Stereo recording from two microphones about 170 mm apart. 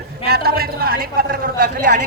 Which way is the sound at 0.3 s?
65° right (ahead or behind).